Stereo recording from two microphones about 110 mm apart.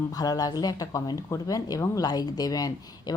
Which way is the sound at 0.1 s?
35° left (ahead or behind).